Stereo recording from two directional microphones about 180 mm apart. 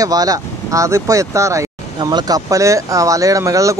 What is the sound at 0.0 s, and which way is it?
Speech, 20° right (ahead or behind).